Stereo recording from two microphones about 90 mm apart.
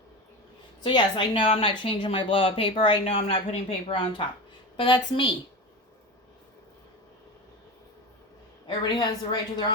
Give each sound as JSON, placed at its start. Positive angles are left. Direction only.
{"t": 0.8, "sound": "a woman's voice", "side_deg": 60}
{"t": 4.8, "sound": "a woman's voice", "side_deg": 60}
{"t": 8.6, "sound": "a woman's voice", "side_deg": 55}